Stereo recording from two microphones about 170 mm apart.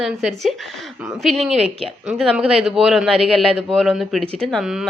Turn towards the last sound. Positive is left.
turn(degrees=0)  # may be behind; listen again after turning